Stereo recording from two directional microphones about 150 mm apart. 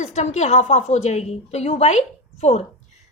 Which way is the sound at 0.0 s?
50° left (ahead or behind).